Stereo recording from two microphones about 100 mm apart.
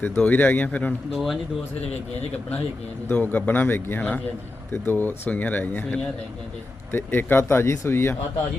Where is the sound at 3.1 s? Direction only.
20° left (ahead or behind).